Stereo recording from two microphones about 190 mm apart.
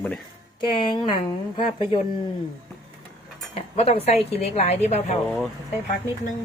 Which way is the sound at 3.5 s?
30° left (ahead or behind).